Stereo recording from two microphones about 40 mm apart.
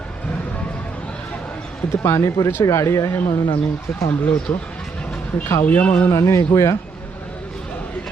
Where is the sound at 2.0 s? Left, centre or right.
Left.